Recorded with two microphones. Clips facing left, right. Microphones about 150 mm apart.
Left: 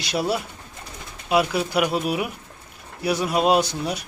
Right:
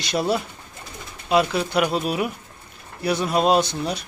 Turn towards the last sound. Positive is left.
turn(degrees=10)  # may be behind; listen again after turning